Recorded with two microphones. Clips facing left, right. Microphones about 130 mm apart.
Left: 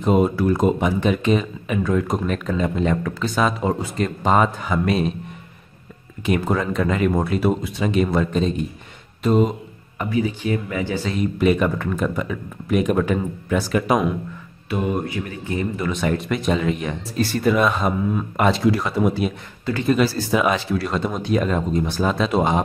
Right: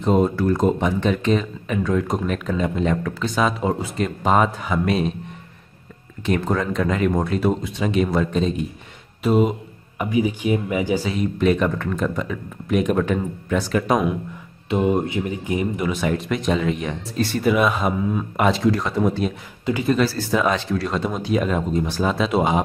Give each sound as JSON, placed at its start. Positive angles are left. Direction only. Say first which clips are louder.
{"t": 0.0, "sound": "speech", "louder": "left 1 dB", "side_deg": 10}
{"t": 6.2, "sound": "speech", "louder": "left 1 dB", "side_deg": 10}
{"t": 11.1, "sound": "speech", "louder": "left 3 dB", "side_deg": 5}
{"t": 14.7, "sound": "speech", "louder": "right 3 dB", "side_deg": -25}
{"t": 15.9, "sound": "speech", "louder": "even", "side_deg": 0}
{"t": 19.6, "sound": "a man's voice", "louder": "right 1 dB", "side_deg": -15}
{"t": 20.0, "sound": "speech", "louder": "left 1 dB", "side_deg": 15}